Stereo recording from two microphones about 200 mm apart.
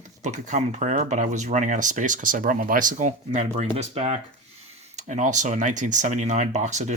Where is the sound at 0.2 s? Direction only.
35° right (ahead or behind).